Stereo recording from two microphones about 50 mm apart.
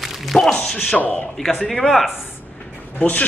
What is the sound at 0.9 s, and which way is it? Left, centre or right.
Speech, left.